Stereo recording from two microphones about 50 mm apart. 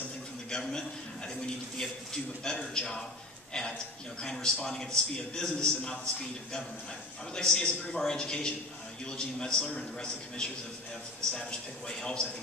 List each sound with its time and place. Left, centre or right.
0.5 s a man's voice: centre
11.9 s a man's voice: centre